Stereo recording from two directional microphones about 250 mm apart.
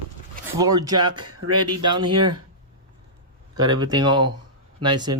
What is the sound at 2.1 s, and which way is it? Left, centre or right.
Speech, right.